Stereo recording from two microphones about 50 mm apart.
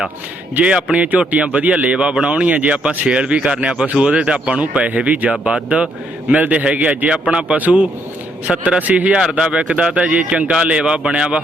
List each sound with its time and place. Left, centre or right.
0.6 s speech: centre
0.9 s speech: right
2.0 s speech: centre
2.2 s speech: right
8.8 s speech: right